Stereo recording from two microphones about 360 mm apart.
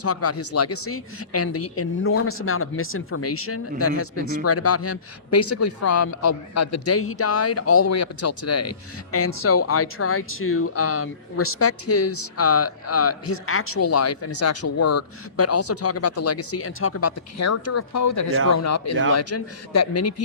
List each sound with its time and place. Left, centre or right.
0.0 s a man's voice: left